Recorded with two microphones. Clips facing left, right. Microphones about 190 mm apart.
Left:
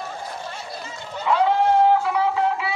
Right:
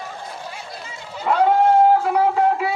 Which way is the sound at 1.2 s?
45° right (ahead or behind).